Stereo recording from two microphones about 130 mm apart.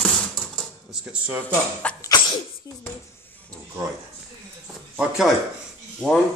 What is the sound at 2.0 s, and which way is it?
Sneeze, 30° left (ahead or behind).